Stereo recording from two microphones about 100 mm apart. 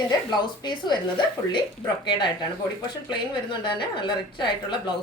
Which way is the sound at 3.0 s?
50° left (ahead or behind).